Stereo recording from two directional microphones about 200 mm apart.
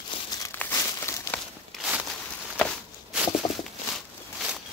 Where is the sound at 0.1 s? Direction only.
20° left (ahead or behind).